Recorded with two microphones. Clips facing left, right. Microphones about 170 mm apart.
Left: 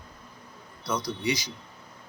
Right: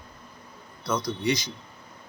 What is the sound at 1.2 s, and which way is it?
Speech, 10° left (ahead or behind).